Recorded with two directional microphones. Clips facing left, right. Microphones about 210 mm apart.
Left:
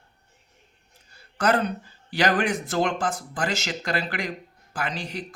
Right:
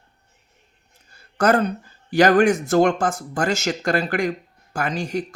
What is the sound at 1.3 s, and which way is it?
Speech, 45° right (ahead or behind).